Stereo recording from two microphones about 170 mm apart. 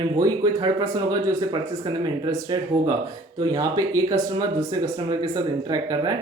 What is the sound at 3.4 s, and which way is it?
Speech, 20° right (ahead or behind).